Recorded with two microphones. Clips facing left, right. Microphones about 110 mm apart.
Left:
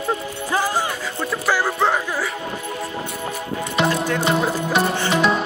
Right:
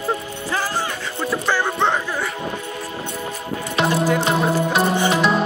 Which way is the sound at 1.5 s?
5° left (ahead or behind).